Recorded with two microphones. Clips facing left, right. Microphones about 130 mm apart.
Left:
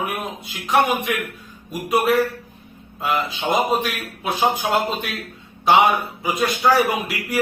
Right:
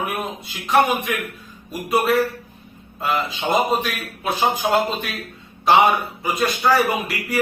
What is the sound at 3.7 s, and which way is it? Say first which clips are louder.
A man's voice: left 1 dB; centre (ahead or behind).